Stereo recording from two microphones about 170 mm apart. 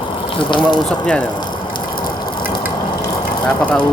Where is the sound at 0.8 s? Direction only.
5° left (ahead or behind).